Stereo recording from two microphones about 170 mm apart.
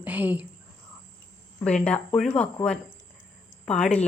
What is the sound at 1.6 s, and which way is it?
Speech, 5° left (ahead or behind).